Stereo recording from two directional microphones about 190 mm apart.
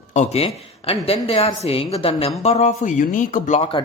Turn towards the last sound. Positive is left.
turn(degrees=30)  # may be behind; listen again after turning